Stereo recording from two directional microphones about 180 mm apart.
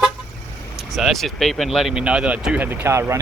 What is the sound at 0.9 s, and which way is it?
Speech, centre (ahead or behind).